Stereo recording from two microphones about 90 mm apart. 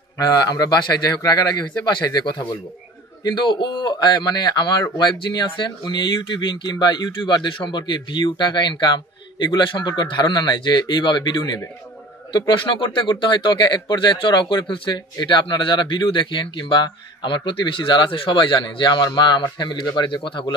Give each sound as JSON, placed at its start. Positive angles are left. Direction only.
{"t": 0.2, "sound": "speech", "side_deg": 40}